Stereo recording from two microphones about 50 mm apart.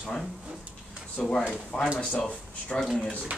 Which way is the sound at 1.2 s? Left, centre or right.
Centre.